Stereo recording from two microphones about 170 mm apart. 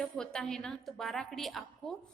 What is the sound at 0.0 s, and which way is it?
A woman's voice, 5° left (ahead or behind).